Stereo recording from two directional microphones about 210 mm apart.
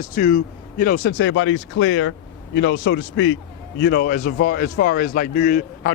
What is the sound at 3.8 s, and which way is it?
Speech, 45° left (ahead or behind).